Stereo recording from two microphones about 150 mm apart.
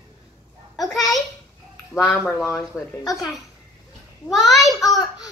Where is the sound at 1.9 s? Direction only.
20° left (ahead or behind).